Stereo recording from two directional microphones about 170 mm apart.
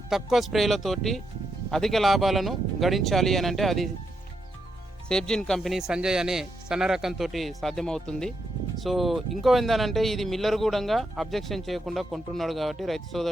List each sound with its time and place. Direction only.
0.1 s speech: centre (ahead or behind)
5.0 s speech: 5° left (ahead or behind)